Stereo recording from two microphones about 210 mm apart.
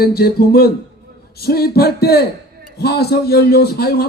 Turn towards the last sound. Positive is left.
turn(degrees=50)  # may be behind; listen again after turning